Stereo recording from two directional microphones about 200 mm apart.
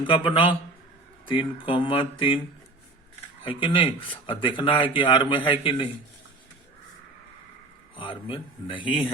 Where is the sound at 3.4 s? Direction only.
25° left (ahead or behind).